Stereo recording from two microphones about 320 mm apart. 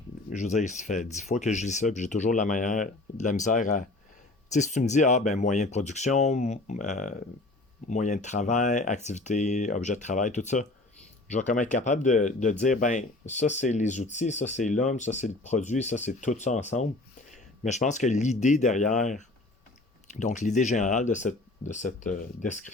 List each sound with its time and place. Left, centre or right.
0.3 s speech: left